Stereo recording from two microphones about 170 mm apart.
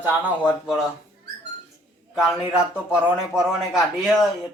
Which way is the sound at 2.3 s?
5° right (ahead or behind).